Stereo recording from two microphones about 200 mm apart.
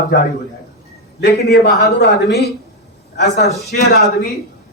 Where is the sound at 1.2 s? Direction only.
55° left (ahead or behind).